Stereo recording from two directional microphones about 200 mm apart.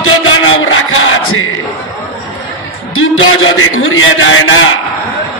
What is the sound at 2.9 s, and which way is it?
A man's voice, 90° left.